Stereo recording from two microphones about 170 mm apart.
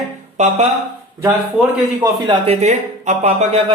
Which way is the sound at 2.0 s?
30° right (ahead or behind).